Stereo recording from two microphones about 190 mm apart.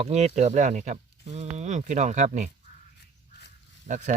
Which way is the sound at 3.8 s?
40° right (ahead or behind).